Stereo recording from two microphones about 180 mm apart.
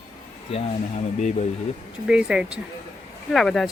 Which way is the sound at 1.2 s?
40° left (ahead or behind).